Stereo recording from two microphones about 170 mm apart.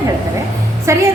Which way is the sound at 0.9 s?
15° right (ahead or behind).